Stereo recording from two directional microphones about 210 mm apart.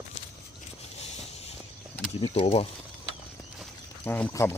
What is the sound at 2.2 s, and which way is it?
Speech, 25° left (ahead or behind).